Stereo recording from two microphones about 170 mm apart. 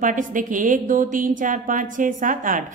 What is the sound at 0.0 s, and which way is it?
Speech, 50° right (ahead or behind).